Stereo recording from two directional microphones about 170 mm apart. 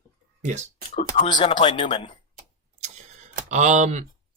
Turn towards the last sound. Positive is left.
turn(degrees=-45)  # may be behind; listen again after turning